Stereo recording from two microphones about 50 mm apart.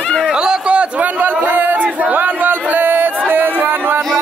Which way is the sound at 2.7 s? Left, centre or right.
Right.